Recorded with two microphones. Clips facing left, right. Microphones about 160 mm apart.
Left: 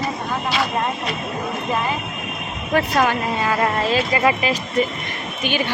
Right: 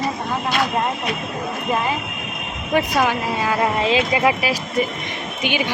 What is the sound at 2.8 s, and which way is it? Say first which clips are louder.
Speech: even; 10° right (ahead or behind).